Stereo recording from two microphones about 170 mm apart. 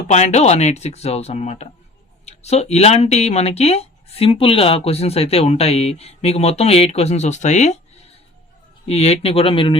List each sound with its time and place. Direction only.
0.1 s speech: 40° left (ahead or behind)